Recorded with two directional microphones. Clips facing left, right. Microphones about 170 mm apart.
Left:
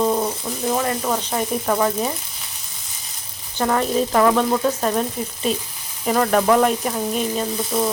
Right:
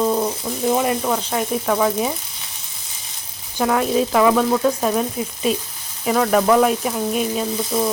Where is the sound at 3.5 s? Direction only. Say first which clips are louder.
Right 1 dB; 5° right (ahead or behind).